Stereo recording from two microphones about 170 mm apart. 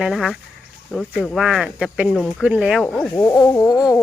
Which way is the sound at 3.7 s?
20° left (ahead or behind).